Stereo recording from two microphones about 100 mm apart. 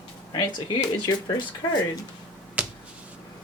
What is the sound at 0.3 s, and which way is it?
Speech, 45° left (ahead or behind).